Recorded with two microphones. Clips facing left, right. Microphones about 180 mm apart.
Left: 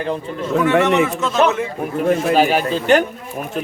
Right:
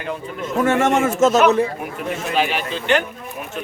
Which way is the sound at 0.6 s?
45° right (ahead or behind).